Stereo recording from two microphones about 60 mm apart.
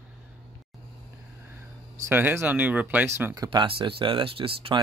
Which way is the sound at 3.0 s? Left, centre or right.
Right.